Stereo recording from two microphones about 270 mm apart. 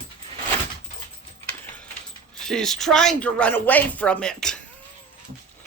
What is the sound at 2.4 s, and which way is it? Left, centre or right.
Speech, centre.